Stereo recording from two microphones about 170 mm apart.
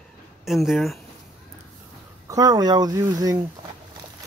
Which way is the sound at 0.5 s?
Centre (ahead or behind).